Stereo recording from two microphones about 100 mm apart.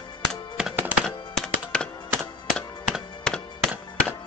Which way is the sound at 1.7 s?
10° left (ahead or behind).